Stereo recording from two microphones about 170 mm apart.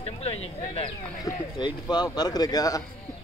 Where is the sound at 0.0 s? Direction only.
35° left (ahead or behind); by 2.8 s 20° left (ahead or behind).